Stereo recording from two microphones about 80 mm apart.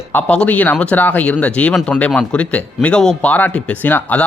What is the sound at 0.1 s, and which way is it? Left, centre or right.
A man's voice, centre.